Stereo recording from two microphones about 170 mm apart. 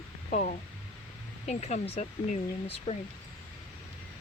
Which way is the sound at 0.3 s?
45° left (ahead or behind).